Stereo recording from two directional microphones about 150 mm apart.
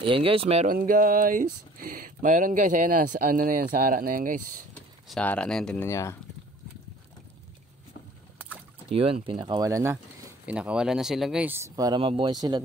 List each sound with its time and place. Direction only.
0.0 s speech: 35° right (ahead or behind)
0.7 s speech: 70° right (ahead or behind)
5.0 s speech: 5° left (ahead or behind)
5.9 s speech: 20° left (ahead or behind)
8.9 s speech: 35° right (ahead or behind); by 9.9 s 20° right (ahead or behind)
10.4 s speech: 10° right (ahead or behind)
11.4 s speech: 15° right (ahead or behind)
12.0 s speech: 35° right (ahead or behind)